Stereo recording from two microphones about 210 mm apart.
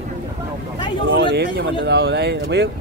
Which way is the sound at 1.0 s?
60° right (ahead or behind).